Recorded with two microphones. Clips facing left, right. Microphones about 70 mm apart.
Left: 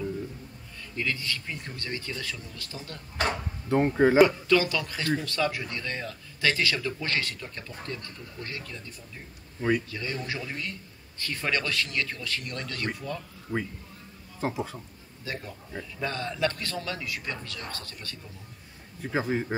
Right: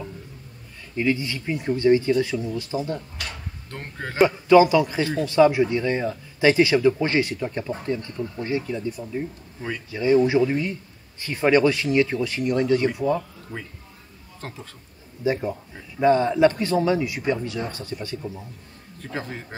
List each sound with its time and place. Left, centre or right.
0.9 s a man's voice: centre
3.2 s a sound: left
3.6 s speech: centre
4.5 s a man's voice: centre
14.4 s speech: centre
15.2 s a man's voice: centre
18.9 s speech: centre